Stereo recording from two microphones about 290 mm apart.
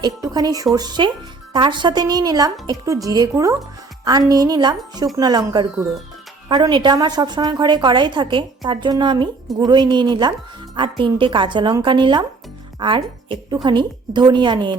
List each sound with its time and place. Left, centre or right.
0.0 s a woman's voice: centre